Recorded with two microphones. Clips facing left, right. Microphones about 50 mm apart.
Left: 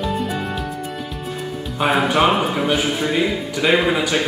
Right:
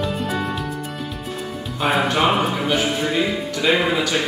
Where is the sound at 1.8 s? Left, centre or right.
Centre.